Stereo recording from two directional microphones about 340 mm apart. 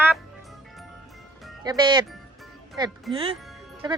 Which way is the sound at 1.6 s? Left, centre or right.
Centre.